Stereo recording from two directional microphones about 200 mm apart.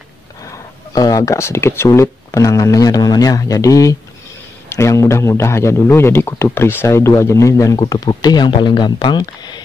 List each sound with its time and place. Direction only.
0.5 s a man's voice: 20° left (ahead or behind)